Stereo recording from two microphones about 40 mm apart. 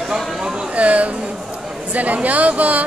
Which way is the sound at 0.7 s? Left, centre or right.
Right.